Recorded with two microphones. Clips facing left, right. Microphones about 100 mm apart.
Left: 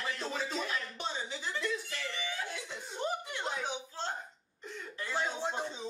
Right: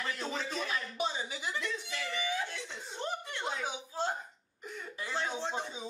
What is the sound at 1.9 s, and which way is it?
Music, 15° right (ahead or behind).